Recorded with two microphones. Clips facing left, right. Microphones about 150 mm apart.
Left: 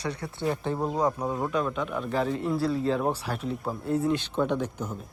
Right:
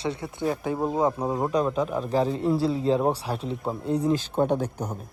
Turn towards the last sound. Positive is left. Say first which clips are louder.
# right 3 dB
turn(degrees=-40)  # may be behind; listen again after turning